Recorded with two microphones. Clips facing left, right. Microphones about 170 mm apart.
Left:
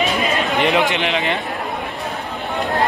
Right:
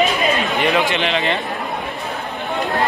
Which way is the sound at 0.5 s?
20° left (ahead or behind).